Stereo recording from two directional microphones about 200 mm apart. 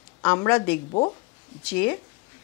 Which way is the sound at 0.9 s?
25° left (ahead or behind).